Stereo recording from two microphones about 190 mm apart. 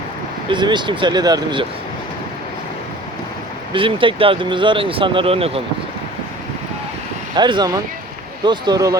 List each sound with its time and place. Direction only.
0.4 s speech: 25° right (ahead or behind)
3.7 s speech: 25° right (ahead or behind)
7.3 s speech: 25° right (ahead or behind)